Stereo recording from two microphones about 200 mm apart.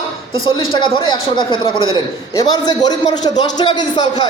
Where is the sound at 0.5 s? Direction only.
25° left (ahead or behind).